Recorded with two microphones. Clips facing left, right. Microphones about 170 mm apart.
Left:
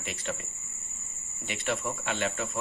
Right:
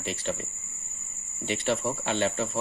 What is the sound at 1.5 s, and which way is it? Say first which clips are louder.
Speech: right 5 dB; 30° right (ahead or behind).